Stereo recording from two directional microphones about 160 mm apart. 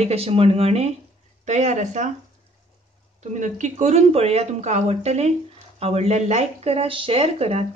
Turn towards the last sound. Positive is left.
turn(degrees=-40)  # may be behind; listen again after turning